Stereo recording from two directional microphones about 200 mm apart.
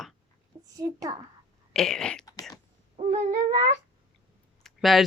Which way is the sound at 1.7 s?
5° left (ahead or behind).